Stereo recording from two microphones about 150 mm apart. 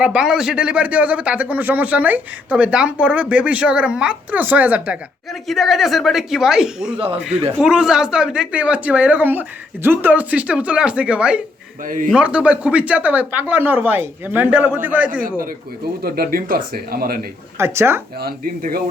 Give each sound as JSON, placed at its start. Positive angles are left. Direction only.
{"t": 0.0, "sound": "speech", "side_deg": -5}
{"t": 5.3, "sound": "speech", "side_deg": 0}
{"t": 6.9, "sound": "speech", "side_deg": -35}
{"t": 7.6, "sound": "speech", "side_deg": -5}
{"t": 11.8, "sound": "a man's voice", "side_deg": -60}
{"t": 12.1, "sound": "speech", "side_deg": -5}
{"t": 16.0, "sound": "speech", "side_deg": -85}
{"t": 17.6, "sound": "speech", "side_deg": -15}
{"t": 18.2, "sound": "speech", "side_deg": -85}